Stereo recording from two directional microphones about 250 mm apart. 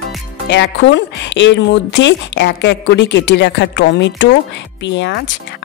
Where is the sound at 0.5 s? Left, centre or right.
Left.